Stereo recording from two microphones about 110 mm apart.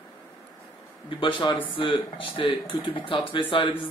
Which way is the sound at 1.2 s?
50° left (ahead or behind).